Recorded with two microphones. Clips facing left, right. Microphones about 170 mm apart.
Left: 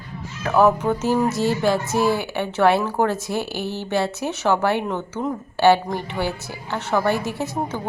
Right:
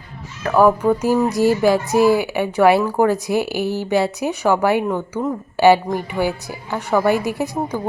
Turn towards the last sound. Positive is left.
turn(degrees=-15)  # may be behind; listen again after turning